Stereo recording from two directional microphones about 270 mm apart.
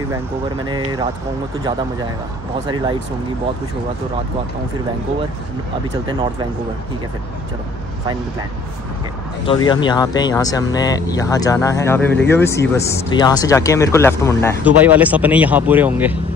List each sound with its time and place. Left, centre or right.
0.7 s speech: centre
9.5 s speech: centre
14.6 s speech: centre